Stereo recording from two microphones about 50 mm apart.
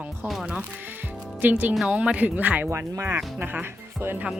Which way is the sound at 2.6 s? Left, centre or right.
Right.